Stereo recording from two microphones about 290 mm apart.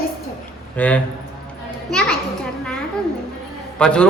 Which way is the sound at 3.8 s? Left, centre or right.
Centre.